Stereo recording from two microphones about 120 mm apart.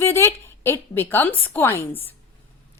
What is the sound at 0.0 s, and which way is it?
A woman's voice, 20° left (ahead or behind).